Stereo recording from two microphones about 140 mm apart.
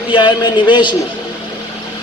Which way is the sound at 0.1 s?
35° left (ahead or behind).